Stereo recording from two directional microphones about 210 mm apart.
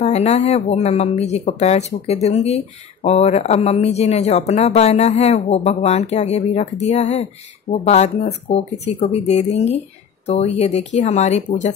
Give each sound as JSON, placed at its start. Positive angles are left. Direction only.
{"t": 0.0, "sound": "speech", "side_deg": 30}